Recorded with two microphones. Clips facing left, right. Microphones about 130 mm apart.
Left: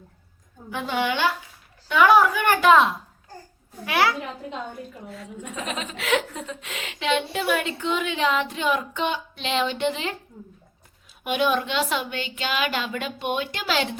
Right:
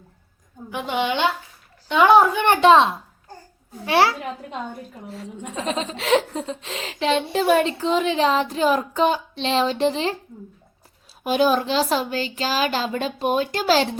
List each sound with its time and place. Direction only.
0.7 s a woman's voice: 20° right (ahead or behind)
11.2 s speech: 35° right (ahead or behind)